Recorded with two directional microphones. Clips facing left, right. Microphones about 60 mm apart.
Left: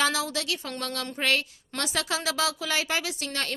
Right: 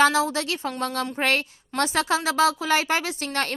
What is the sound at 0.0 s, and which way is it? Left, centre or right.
A woman's voice, right.